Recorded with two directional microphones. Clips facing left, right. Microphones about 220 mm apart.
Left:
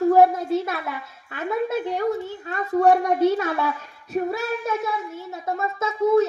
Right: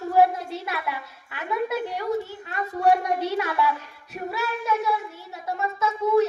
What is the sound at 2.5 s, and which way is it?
A child's voice, 50° left (ahead or behind).